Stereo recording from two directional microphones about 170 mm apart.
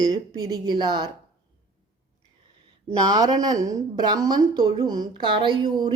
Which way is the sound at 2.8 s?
20° right (ahead or behind).